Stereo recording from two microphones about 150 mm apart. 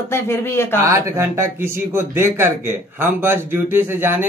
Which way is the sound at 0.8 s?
20° right (ahead or behind).